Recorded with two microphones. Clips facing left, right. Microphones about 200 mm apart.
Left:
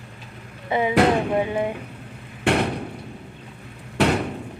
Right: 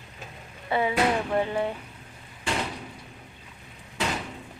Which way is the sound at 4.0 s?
65° left (ahead or behind).